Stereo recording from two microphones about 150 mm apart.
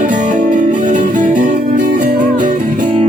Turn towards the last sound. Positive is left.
turn(degrees=-55)  # may be behind; listen again after turning